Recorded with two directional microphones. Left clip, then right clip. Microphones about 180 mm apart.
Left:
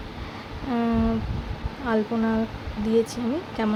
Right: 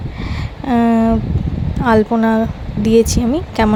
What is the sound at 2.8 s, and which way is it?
Speech, 50° right (ahead or behind).